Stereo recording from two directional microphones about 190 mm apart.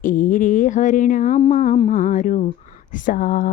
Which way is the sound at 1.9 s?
45° left (ahead or behind).